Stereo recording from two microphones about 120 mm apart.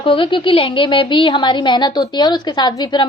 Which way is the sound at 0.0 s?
45° left (ahead or behind).